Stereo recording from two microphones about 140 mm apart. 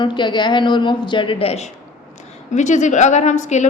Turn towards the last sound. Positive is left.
turn(degrees=60)  # may be behind; listen again after turning